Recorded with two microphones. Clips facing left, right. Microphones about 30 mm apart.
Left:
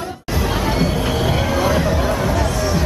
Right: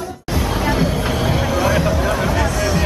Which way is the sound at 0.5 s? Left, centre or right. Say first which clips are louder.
Right 1 dB; centre.